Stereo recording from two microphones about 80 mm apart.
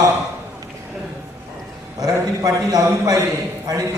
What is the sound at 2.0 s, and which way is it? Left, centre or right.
A man's voice, right.